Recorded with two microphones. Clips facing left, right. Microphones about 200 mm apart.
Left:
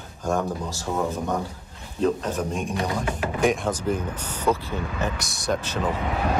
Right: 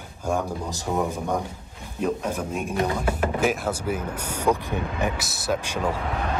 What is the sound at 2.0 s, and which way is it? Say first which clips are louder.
Speech: left 2 dB; 10° right (ahead or behind).